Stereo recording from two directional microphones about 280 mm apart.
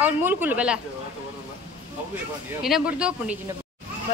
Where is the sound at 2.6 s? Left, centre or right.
Centre.